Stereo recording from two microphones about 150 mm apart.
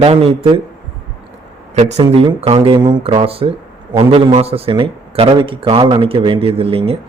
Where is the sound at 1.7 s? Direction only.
50° right (ahead or behind).